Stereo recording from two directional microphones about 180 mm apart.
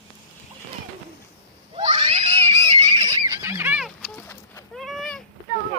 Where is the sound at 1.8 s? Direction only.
25° right (ahead or behind).